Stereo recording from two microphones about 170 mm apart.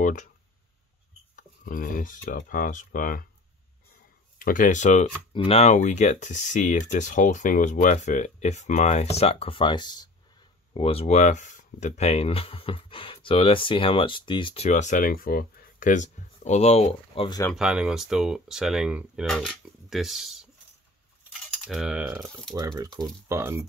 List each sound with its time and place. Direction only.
0.0 s speech: 45° left (ahead or behind)
1.3 s speech: 55° left (ahead or behind)
4.4 s speech: 55° left (ahead or behind)
5.3 s speech: 35° left (ahead or behind)
17.6 s speech: 5° right (ahead or behind)
21.2 s coin: 5° right (ahead or behind)
22.6 s speech: 20° right (ahead or behind)